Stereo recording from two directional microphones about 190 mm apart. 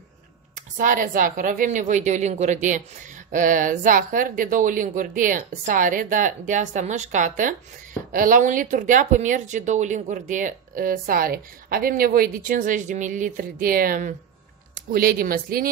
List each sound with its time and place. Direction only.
0.7 s speech: 45° right (ahead or behind)